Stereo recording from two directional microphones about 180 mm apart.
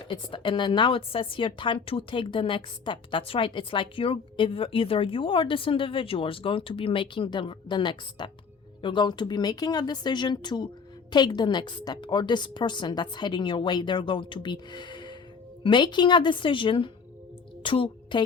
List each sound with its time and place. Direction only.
0.0 s a woman's voice: 25° left (ahead or behind)